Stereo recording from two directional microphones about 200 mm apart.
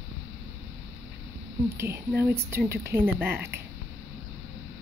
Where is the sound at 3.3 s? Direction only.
55° right (ahead or behind).